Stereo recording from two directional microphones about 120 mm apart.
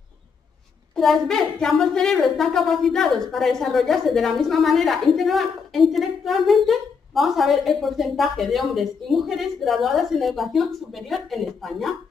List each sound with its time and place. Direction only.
0.9 s a woman's voice: centre (ahead or behind)